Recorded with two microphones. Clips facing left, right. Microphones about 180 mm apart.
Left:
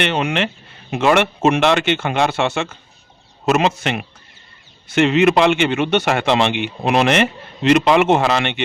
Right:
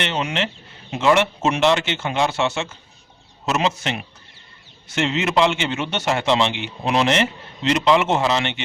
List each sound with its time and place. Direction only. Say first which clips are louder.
0.0 s speech: left 5 dB; 60° left (ahead or behind)